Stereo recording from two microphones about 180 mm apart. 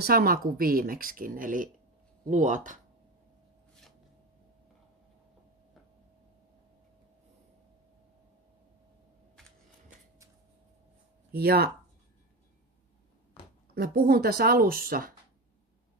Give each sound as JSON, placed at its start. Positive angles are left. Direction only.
{"t": 0.0, "sound": "speech", "side_deg": -55}
{"t": 9.8, "sound": "a sound", "side_deg": -15}
{"t": 11.3, "sound": "speech", "side_deg": -60}
{"t": 13.7, "sound": "speech", "side_deg": -55}